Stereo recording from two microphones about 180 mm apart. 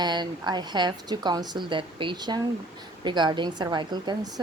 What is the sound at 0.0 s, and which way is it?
A woman's voice, 25° right (ahead or behind).